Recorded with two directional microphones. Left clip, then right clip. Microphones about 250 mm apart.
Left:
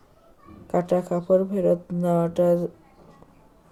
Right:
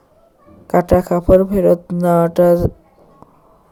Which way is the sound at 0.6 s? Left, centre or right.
Right.